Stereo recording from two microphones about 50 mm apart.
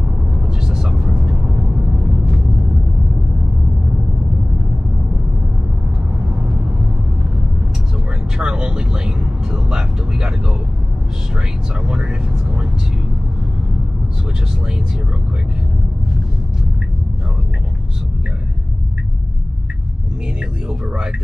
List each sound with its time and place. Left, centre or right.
0.7 s vehicle: centre
8.4 s vehicle: centre
11.9 s vehicle: centre